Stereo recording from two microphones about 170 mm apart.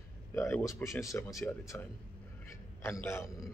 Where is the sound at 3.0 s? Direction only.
15° left (ahead or behind).